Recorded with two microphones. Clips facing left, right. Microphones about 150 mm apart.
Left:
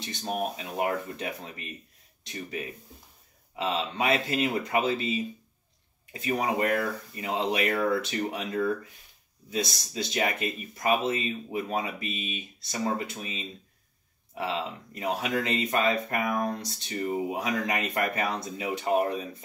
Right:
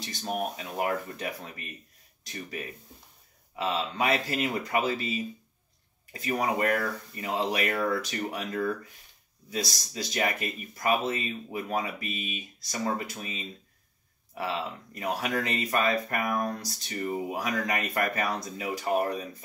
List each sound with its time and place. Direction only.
0.2 s speech: 25° left (ahead or behind)
6.4 s speech: 30° left (ahead or behind)
9.6 s speech: 35° right (ahead or behind)
9.9 s speech: 25° left (ahead or behind)